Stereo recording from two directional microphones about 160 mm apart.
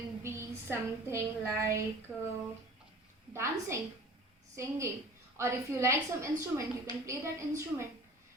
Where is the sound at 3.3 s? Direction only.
15° right (ahead or behind).